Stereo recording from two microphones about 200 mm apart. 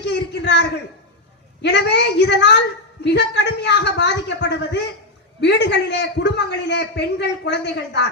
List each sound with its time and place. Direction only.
0.0 s a man's voice: 60° left (ahead or behind)